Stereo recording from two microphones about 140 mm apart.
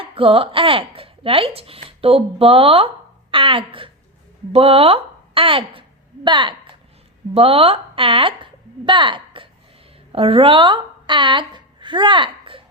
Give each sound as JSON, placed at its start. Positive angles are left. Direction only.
{"t": 0.0, "sound": "a woman's voice", "side_deg": -40}